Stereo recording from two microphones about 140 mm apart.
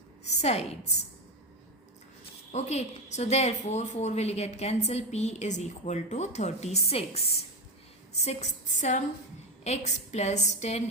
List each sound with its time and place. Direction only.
0.3 s a woman's voice: 50° left (ahead or behind)
2.5 s a woman's voice: 55° left (ahead or behind)